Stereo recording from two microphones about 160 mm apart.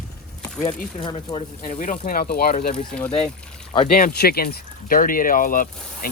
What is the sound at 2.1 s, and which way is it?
Speech, 65° left (ahead or behind).